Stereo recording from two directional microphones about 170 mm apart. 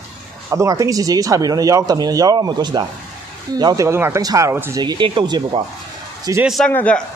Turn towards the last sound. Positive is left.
turn(degrees=10)  # may be behind; listen again after turning